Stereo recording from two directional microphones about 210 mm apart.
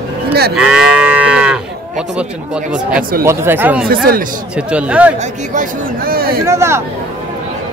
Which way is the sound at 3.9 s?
45° right (ahead or behind).